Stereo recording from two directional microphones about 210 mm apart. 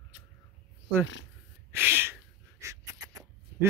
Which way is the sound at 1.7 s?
10° right (ahead or behind).